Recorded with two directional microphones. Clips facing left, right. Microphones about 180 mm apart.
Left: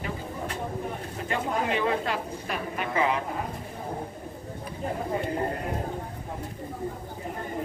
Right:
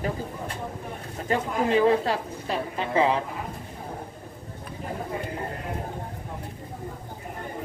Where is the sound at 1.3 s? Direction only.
35° right (ahead or behind).